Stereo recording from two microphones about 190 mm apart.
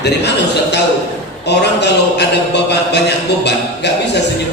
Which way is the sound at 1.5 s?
65° left (ahead or behind).